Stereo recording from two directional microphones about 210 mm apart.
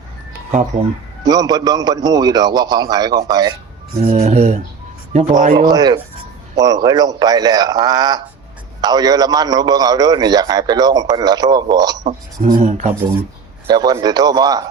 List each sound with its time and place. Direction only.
1.2 s a man's voice: 20° right (ahead or behind)
4.0 s speech: 30° right (ahead or behind)
5.6 s a man's voice: 20° right (ahead or behind)
12.0 s speech: 40° right (ahead or behind)
13.7 s a man's voice: 20° right (ahead or behind)